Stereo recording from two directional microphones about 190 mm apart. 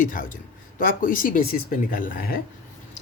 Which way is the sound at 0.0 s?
45° left (ahead or behind).